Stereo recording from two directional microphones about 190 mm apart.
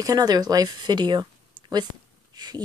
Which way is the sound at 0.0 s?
20° right (ahead or behind).